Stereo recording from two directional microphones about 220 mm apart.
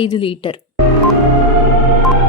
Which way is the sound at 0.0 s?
25° left (ahead or behind).